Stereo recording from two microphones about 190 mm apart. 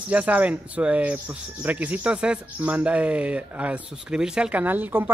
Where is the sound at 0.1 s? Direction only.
5° right (ahead or behind).